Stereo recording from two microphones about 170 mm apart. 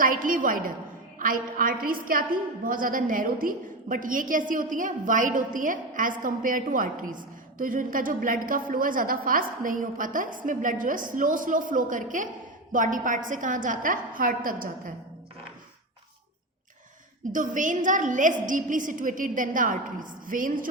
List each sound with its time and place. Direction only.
0.0 s a woman's voice: 55° right (ahead or behind)
17.3 s a woman's voice: 50° right (ahead or behind)